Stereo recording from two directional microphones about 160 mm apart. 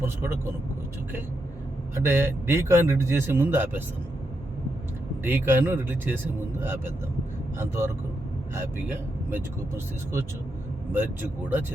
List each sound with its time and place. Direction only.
0.0 s speech: 15° right (ahead or behind)
2.0 s speech: 15° right (ahead or behind)
5.2 s speech: 15° right (ahead or behind)
8.5 s speech: 15° right (ahead or behind)